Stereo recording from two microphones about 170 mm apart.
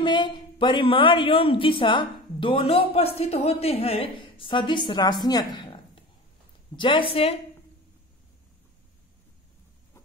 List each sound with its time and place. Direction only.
0.0 s a woman's voice: 25° left (ahead or behind)